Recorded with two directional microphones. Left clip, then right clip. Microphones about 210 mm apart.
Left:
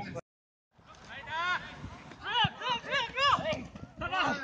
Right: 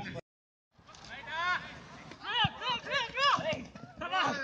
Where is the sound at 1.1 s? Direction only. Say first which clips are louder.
Even; 5° left (ahead or behind).